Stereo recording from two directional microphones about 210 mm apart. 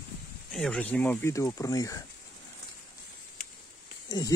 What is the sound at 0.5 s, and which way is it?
Speech, 5° left (ahead or behind).